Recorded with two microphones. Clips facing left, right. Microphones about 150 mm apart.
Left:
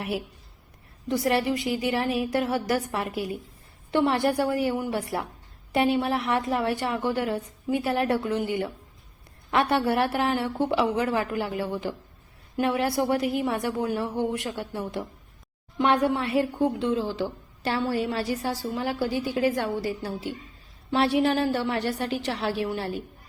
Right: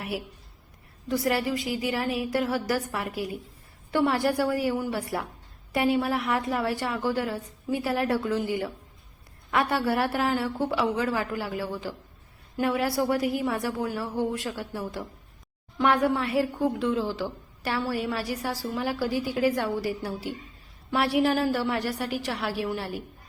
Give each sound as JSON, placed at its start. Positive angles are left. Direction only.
{"t": 1.0, "sound": "a woman's voice", "side_deg": 25}